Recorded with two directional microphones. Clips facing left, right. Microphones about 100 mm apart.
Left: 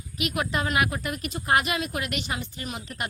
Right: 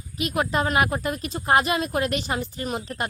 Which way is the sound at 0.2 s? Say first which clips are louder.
Right 4 dB; 30° right (ahead or behind).